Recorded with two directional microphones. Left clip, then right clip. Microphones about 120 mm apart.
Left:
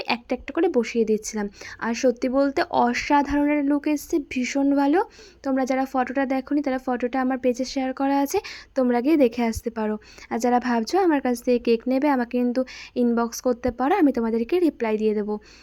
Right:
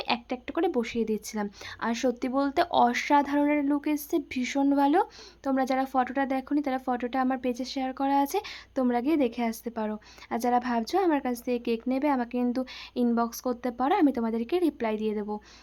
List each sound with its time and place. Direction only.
0.0 s a woman's voice: 30° left (ahead or behind)